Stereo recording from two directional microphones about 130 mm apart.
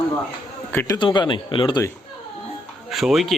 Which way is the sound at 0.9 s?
35° left (ahead or behind).